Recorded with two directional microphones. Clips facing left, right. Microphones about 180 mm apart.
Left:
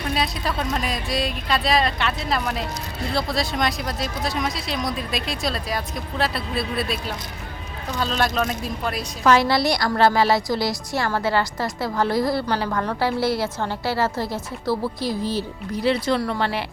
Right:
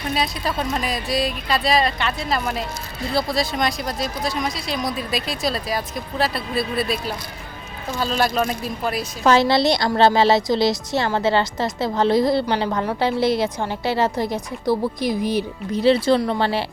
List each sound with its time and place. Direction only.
0.1 s speech: centre (ahead or behind)
9.2 s a woman's voice: 25° right (ahead or behind)
15.8 s a woman's voice: 30° right (ahead or behind)